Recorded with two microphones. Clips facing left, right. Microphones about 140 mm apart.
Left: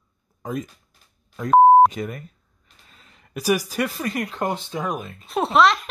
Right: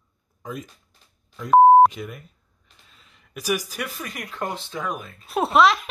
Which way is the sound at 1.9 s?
50° left (ahead or behind).